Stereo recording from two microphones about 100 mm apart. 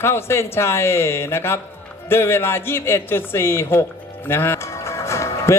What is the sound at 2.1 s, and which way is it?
Speech, 25° left (ahead or behind).